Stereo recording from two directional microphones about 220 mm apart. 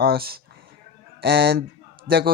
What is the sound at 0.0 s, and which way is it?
Speech, 45° right (ahead or behind).